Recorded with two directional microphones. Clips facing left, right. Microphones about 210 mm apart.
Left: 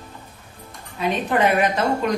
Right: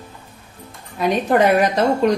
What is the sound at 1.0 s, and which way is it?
Speech, 40° right (ahead or behind).